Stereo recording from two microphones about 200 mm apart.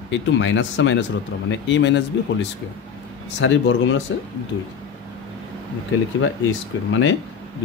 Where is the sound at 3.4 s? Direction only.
70° left (ahead or behind).